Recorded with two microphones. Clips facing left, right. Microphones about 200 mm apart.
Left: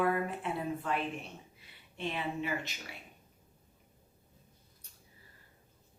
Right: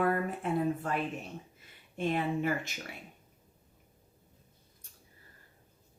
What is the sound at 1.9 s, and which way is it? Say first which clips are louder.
Speech: right 5 dB; 50° right (ahead or behind).